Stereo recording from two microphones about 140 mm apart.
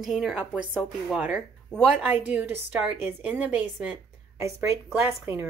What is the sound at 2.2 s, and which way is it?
A woman's voice, 15° right (ahead or behind).